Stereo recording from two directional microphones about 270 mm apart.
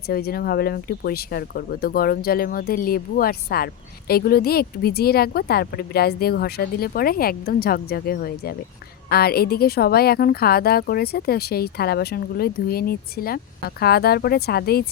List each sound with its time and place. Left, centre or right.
0.1 s speech: left